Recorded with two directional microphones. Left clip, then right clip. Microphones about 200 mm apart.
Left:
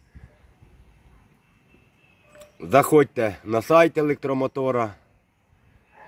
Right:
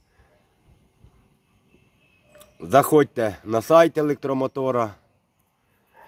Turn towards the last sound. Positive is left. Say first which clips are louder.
# right 1 dB
turn(degrees=0)  # may be behind; listen again after turning